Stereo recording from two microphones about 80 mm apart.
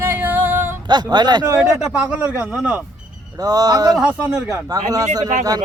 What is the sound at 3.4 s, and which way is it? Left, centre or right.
Speech, right.